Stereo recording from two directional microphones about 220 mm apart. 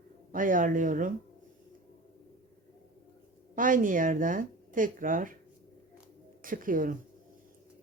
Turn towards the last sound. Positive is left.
turn(degrees=-40)  # may be behind; listen again after turning